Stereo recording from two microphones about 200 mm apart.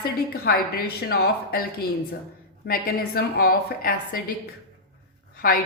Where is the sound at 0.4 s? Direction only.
50° left (ahead or behind).